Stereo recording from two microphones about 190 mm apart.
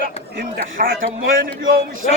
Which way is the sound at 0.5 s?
50° right (ahead or behind).